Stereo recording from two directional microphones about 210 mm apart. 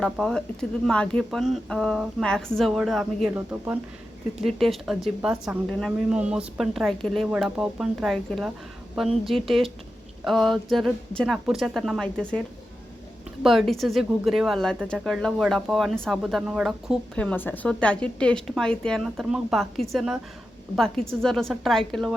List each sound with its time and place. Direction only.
0.0 s speech: centre (ahead or behind)
13.4 s speech: centre (ahead or behind)